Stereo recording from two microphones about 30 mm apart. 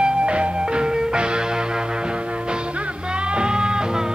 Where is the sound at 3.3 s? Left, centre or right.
Right.